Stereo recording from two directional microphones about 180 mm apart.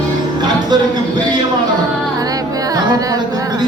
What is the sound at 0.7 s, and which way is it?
Music, 25° right (ahead or behind).